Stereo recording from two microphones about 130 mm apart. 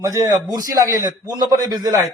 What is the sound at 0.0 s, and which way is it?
A man's voice, 25° right (ahead or behind).